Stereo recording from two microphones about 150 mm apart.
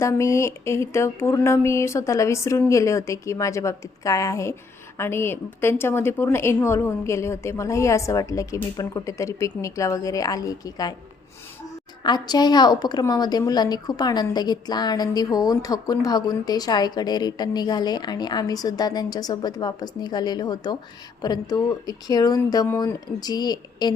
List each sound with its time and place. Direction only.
0.0 s a woman's voice: 20° left (ahead or behind)
12.0 s a woman's voice: 30° left (ahead or behind)